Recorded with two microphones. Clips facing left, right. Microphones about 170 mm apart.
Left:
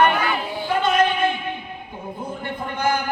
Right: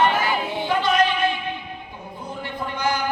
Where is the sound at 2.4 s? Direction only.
50° left (ahead or behind).